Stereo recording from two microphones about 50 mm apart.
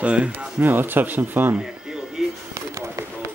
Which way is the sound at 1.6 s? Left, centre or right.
Centre.